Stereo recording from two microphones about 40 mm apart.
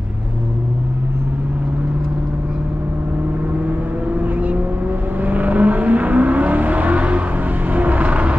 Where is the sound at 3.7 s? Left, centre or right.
Right.